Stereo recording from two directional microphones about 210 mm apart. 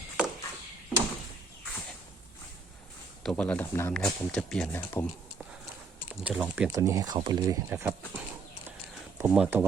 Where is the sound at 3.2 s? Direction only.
5° left (ahead or behind).